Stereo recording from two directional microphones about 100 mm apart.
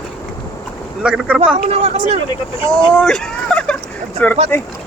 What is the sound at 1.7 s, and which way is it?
Speech, 90° right.